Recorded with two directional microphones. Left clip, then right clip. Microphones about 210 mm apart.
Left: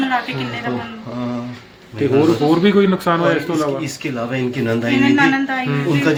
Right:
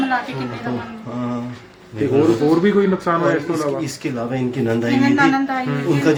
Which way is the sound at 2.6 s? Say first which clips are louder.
Left 2 dB; 55° left (ahead or behind).